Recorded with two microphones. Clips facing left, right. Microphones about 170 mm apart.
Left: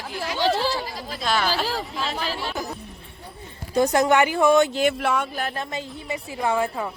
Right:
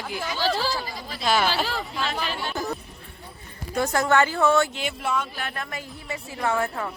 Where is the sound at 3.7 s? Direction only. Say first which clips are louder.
Left 4 dB; 20° left (ahead or behind).